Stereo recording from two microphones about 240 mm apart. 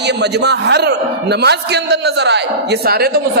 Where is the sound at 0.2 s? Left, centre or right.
Right.